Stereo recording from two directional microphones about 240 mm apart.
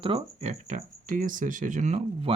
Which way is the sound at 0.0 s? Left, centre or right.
Right.